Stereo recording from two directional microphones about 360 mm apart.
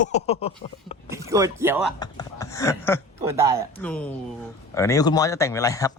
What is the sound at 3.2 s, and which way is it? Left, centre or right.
Speech, centre.